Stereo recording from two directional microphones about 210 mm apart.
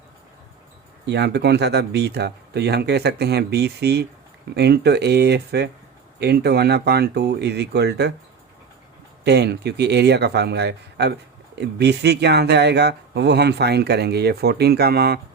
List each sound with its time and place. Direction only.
1.0 s speech: 55° right (ahead or behind)
9.2 s speech: 50° right (ahead or behind)